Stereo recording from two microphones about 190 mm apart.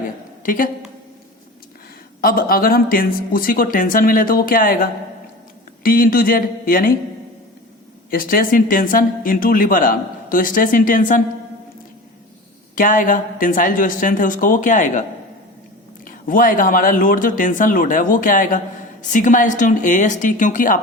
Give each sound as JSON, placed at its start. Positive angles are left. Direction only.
{"t": 0.4, "sound": "speech", "side_deg": 45}
{"t": 2.2, "sound": "speech", "side_deg": 50}
{"t": 8.1, "sound": "speech", "side_deg": 50}
{"t": 12.7, "sound": "speech", "side_deg": 45}
{"t": 16.0, "sound": "speech", "side_deg": 45}